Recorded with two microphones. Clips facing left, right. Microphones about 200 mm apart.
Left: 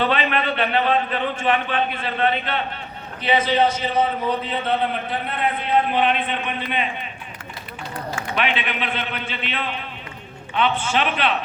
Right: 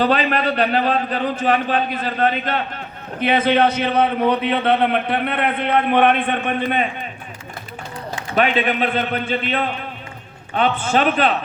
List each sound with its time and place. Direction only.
0.0 s a man's voice: 40° right (ahead or behind)
8.4 s a man's voice: 45° right (ahead or behind)